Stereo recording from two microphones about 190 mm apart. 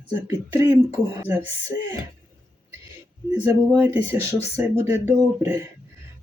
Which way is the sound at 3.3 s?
10° right (ahead or behind).